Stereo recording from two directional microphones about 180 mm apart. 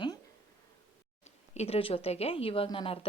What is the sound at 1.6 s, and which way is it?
A woman's voice, 35° left (ahead or behind).